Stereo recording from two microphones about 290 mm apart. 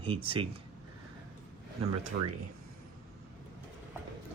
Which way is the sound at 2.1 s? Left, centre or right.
Right.